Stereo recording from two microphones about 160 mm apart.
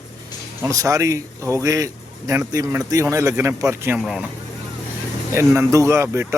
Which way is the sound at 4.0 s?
Centre (ahead or behind).